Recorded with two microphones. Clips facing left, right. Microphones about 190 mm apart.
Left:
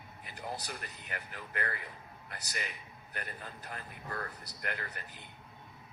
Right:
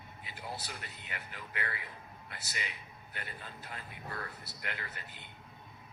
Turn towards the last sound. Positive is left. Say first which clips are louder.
# left 3 dB
turn(degrees=45)  # may be behind; listen again after turning